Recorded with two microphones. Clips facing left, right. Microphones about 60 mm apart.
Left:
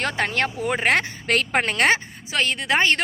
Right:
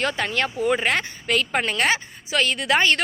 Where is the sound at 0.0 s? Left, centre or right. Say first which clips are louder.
Even; left.